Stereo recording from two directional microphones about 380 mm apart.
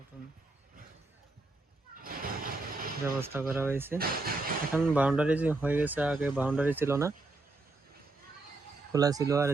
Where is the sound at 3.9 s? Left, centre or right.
Right.